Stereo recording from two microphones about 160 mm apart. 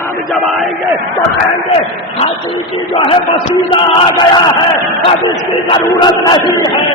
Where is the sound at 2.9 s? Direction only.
35° left (ahead or behind).